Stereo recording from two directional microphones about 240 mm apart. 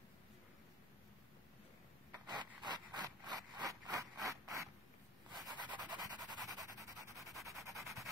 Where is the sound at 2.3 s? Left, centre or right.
Centre.